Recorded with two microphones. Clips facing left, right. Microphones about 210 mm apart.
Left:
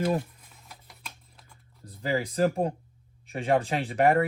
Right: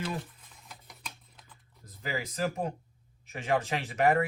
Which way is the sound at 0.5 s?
Centre (ahead or behind).